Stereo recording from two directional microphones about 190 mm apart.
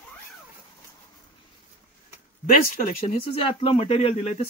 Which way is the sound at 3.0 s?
30° left (ahead or behind).